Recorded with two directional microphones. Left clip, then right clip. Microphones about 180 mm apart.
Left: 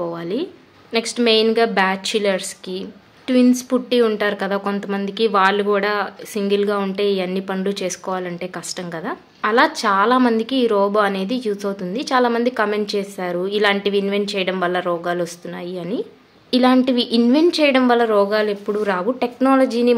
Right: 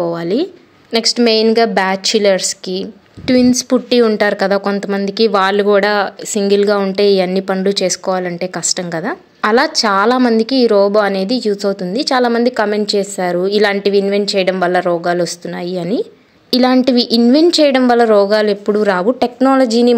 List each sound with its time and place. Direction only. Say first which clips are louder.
0.0 s a woman's voice: right 8 dB; 35° right (ahead or behind)